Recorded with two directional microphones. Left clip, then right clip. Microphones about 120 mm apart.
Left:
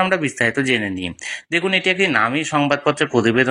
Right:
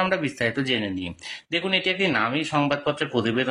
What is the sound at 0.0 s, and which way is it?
Speech, 35° left (ahead or behind).